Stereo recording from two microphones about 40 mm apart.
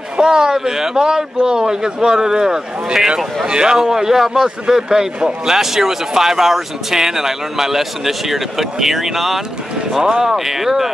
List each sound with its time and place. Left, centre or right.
0.2 s a man's voice: centre